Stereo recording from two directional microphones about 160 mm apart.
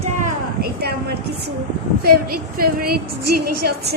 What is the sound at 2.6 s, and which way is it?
A woman's voice, 70° right (ahead or behind).